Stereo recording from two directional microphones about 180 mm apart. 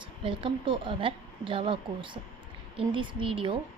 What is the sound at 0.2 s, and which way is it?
A woman's voice, 30° right (ahead or behind).